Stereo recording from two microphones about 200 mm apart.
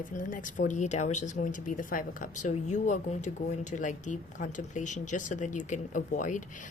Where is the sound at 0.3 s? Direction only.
40° left (ahead or behind).